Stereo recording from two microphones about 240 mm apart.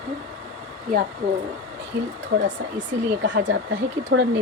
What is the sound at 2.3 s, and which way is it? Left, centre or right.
Speech, right.